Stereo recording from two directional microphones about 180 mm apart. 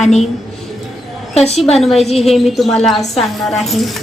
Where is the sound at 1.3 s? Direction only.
35° left (ahead or behind).